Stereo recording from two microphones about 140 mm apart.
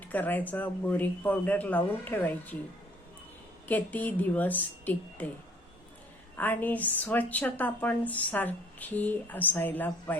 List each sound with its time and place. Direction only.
0.0 s a woman's voice: 10° left (ahead or behind)
3.7 s a woman's voice: 10° left (ahead or behind)
6.3 s a woman's voice: 15° left (ahead or behind)